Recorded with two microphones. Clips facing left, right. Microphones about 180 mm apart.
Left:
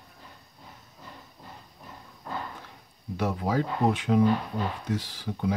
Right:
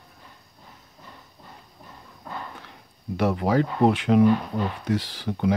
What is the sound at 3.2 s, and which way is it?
Speech, 70° right (ahead or behind).